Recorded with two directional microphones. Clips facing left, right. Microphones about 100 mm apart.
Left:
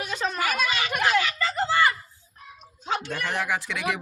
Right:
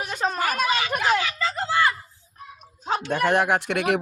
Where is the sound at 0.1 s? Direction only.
45° right (ahead or behind).